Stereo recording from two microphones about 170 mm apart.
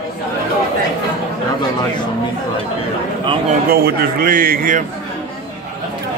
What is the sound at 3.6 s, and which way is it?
A man's voice, 65° right (ahead or behind).